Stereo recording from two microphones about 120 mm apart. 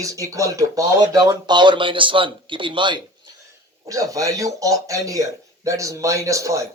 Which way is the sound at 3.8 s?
30° right (ahead or behind).